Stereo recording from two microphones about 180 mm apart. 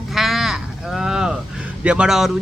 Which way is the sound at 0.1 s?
Centre (ahead or behind).